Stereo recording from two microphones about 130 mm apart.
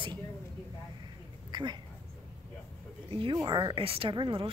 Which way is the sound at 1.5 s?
35° right (ahead or behind).